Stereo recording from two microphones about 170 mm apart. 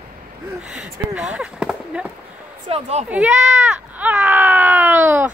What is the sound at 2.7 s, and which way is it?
Speech, 40° right (ahead or behind).